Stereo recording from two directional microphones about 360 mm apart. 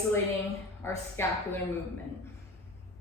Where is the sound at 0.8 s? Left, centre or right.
Centre.